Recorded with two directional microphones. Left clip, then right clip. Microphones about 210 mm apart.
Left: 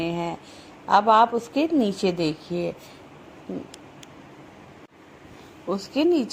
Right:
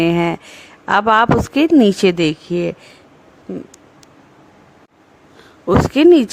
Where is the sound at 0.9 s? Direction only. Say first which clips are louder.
Right 5 dB; 35° right (ahead or behind).